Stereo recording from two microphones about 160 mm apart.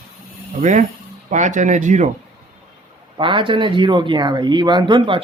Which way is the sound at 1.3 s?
50° right (ahead or behind).